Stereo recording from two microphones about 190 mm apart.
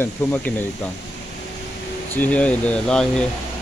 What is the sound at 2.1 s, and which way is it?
Speech, 10° left (ahead or behind).